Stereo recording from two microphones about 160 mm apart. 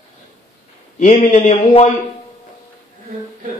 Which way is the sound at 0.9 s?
50° left (ahead or behind).